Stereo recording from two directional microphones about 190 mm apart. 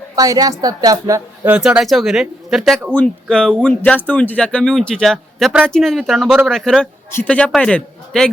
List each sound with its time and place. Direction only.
0.2 s a woman's voice: 20° right (ahead or behind)
1.5 s speech: 5° right (ahead or behind)